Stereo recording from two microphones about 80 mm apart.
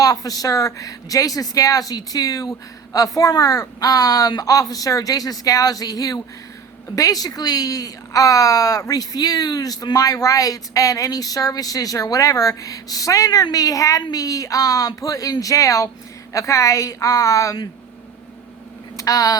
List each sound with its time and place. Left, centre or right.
0.0 s a woman's voice: left
18.9 s speech: left